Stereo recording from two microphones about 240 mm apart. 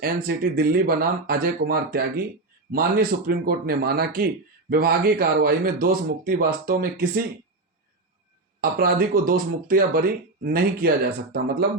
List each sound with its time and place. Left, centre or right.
0.0 s speech: right
8.6 s speech: right